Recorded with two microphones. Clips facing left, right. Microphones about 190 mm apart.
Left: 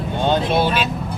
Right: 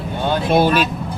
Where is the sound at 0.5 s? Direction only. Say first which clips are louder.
Right 4 dB; 45° right (ahead or behind).